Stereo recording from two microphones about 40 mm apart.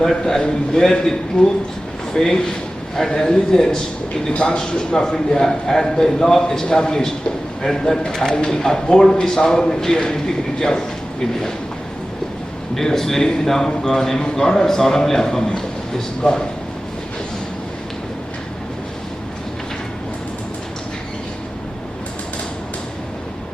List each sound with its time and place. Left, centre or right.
0.0 s a man's voice: centre
12.7 s a man's voice: centre